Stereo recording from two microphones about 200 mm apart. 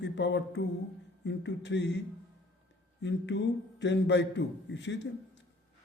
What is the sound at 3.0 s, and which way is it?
A man's voice, 60° left (ahead or behind).